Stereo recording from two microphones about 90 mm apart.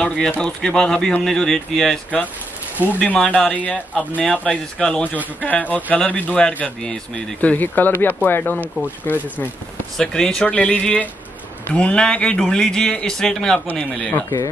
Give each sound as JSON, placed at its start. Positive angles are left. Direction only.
{"t": 0.0, "sound": "speech", "side_deg": 5}
{"t": 2.9, "sound": "speech", "side_deg": 20}
{"t": 7.5, "sound": "speech", "side_deg": 20}
{"t": 9.9, "sound": "speech", "side_deg": 10}